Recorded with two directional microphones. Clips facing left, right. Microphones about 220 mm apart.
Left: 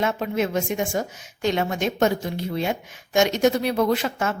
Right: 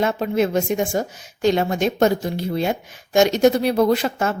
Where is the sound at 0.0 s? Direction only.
35° right (ahead or behind).